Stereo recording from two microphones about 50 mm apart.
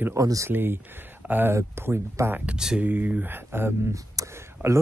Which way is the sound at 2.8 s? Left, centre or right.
Right.